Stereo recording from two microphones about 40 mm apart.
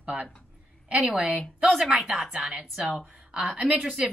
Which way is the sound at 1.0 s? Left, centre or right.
Right.